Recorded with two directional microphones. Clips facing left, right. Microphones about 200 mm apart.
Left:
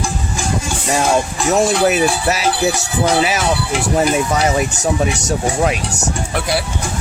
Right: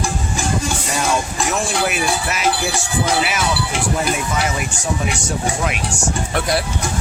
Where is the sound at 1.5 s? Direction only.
40° left (ahead or behind).